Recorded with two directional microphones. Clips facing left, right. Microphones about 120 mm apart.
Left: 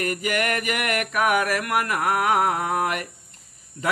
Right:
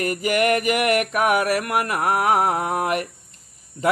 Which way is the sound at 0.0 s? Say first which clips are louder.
Right 4 dB; 35° right (ahead or behind).